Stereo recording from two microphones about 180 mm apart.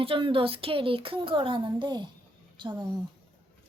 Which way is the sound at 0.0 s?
30° right (ahead or behind).